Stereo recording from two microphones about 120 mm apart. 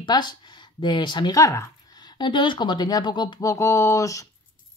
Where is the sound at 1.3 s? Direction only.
25° left (ahead or behind).